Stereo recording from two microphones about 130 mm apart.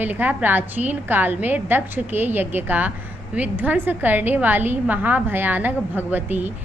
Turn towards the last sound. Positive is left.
turn(degrees=-15)  # may be behind; listen again after turning